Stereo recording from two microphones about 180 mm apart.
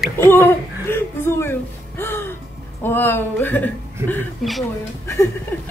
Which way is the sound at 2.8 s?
10° left (ahead or behind).